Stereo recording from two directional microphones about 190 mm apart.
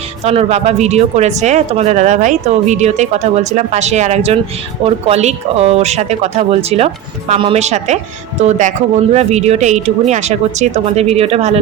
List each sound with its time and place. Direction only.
0.3 s speech: 35° right (ahead or behind)